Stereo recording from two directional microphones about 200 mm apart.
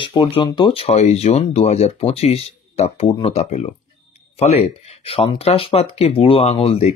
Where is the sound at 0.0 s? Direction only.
25° left (ahead or behind).